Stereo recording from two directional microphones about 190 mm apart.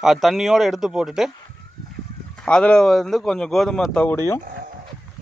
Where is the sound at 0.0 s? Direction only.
Centre (ahead or behind).